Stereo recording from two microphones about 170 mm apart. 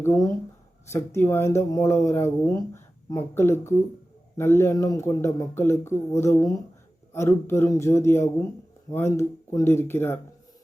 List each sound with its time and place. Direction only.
0.0 s speech: 20° left (ahead or behind)